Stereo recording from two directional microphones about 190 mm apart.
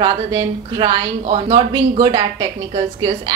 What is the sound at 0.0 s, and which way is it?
A woman's voice, 25° right (ahead or behind).